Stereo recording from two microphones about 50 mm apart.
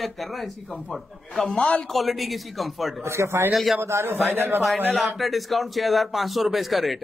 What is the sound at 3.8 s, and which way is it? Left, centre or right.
Speech, right.